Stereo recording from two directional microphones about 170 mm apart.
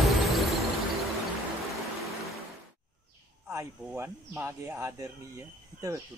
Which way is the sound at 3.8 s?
10° right (ahead or behind).